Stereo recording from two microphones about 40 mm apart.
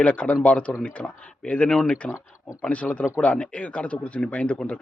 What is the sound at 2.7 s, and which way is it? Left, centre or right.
A man's voice, left.